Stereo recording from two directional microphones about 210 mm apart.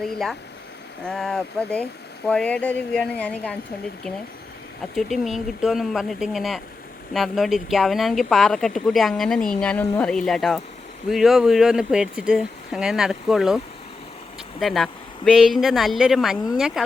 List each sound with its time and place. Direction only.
0.0 s speech: centre (ahead or behind)
4.9 s speech: centre (ahead or behind)
14.6 s speech: centre (ahead or behind)